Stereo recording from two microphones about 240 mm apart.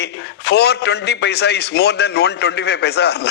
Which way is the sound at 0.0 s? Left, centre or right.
Left.